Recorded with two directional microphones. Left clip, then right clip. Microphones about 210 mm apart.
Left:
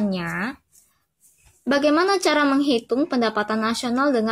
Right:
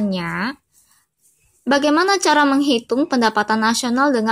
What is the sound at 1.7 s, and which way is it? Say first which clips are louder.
A woman's voice: right 3 dB; 10° right (ahead or behind).